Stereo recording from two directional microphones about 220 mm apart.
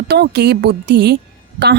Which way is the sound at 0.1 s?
50° right (ahead or behind).